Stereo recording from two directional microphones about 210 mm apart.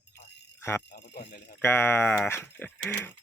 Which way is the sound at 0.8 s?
55° left (ahead or behind).